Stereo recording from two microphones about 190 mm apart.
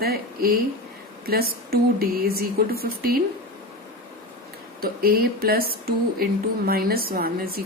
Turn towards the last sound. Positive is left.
turn(degrees=-50)  # may be behind; listen again after turning